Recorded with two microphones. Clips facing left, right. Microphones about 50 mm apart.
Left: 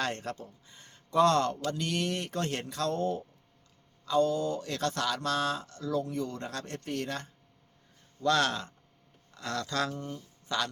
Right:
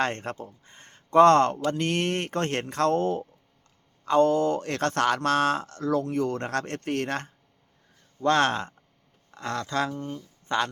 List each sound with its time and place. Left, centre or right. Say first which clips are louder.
0.0 s speech: right 5 dB; right
8.2 s speech: right 5 dB; right